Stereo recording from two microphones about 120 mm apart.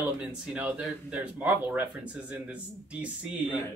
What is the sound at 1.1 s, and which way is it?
Speech, 15° right (ahead or behind).